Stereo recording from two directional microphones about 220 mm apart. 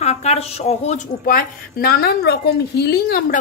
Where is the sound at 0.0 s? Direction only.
30° left (ahead or behind).